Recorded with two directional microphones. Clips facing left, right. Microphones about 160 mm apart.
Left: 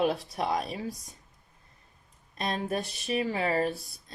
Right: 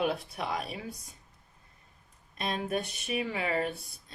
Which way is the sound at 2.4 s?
35° left (ahead or behind).